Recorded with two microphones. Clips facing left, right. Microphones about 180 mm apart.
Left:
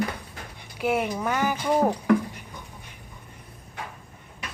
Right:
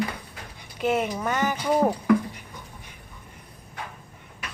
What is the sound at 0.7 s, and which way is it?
Speech, 10° left (ahead or behind).